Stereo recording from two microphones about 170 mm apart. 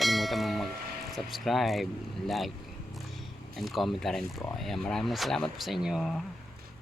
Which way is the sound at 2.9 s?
Centre (ahead or behind).